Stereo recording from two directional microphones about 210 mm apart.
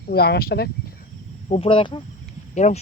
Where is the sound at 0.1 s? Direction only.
50° left (ahead or behind).